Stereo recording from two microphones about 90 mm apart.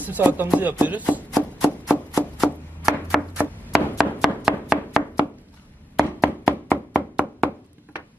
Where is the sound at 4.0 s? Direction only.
5° right (ahead or behind).